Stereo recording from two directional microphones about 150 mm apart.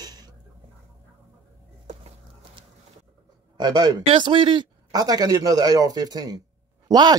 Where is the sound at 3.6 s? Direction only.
25° right (ahead or behind).